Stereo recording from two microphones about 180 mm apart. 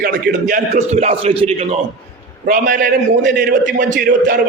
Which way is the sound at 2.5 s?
50° right (ahead or behind).